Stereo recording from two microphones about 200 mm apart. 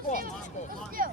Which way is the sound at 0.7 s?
45° right (ahead or behind).